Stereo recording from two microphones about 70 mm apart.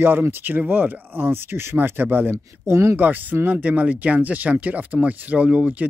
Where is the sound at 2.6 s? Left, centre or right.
Right.